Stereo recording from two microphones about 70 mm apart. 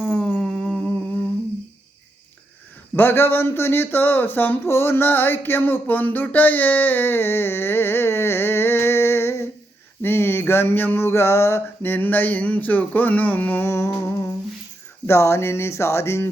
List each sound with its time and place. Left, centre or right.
0.0 s a sound: centre
2.9 s speech: left
10.0 s a sound: left
13.7 s speech: left
14.0 s humming: left
15.0 s speech: left